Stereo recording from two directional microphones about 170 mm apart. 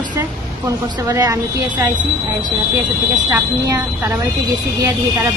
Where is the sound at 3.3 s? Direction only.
15° right (ahead or behind).